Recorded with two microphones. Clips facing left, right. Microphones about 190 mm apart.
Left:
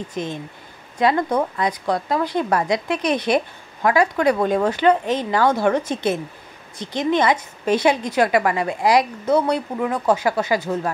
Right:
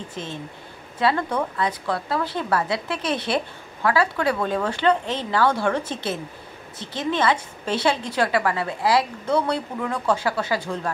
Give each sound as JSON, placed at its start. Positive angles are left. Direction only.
{"t": 0.1, "sound": "a woman's voice", "side_deg": 15}